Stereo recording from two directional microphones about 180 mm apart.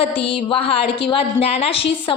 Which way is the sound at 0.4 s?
30° left (ahead or behind).